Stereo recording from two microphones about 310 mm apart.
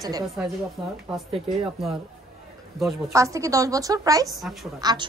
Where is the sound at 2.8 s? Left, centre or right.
Centre.